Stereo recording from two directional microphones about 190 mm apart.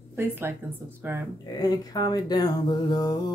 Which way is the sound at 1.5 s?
20° left (ahead or behind).